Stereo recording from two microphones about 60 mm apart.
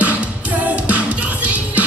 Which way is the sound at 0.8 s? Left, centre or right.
Right.